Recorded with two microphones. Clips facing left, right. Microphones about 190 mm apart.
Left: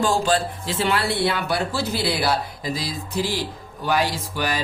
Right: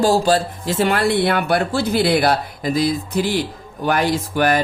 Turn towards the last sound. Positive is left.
turn(degrees=-55)  # may be behind; listen again after turning